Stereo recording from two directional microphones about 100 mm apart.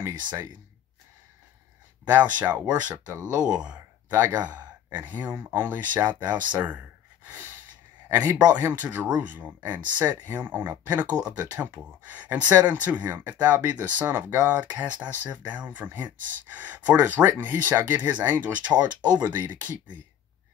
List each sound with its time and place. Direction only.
0.2 s speech: 45° right (ahead or behind)
2.0 s speech: 15° right (ahead or behind)
7.2 s a sound: 15° right (ahead or behind)
8.1 s a man's voice: 20° right (ahead or behind)